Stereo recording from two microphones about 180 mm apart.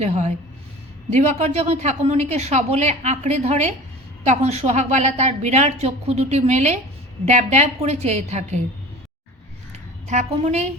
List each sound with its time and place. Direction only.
0.0 s a woman's voice: 35° right (ahead or behind)
10.1 s a woman's voice: 40° right (ahead or behind)